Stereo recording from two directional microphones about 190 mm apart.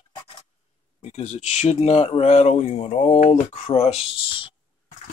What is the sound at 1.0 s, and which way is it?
Speech, 35° left (ahead or behind).